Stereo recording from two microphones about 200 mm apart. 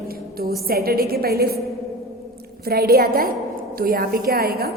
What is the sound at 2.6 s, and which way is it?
A woman's voice, 50° right (ahead or behind).